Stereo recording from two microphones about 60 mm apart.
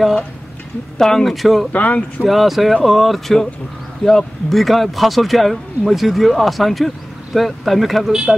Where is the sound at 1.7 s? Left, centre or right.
Left.